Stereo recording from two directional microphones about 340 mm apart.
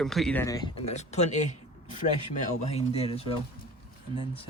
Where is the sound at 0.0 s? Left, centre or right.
Centre.